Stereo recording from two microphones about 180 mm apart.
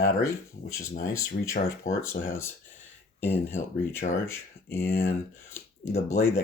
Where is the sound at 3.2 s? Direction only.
10° left (ahead or behind).